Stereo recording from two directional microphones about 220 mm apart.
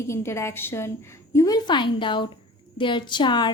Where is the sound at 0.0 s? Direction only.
10° left (ahead or behind).